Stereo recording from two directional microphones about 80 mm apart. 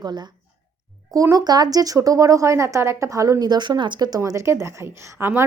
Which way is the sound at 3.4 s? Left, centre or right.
Right.